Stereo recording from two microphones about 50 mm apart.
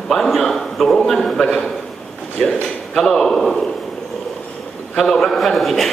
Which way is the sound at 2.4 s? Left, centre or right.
Centre.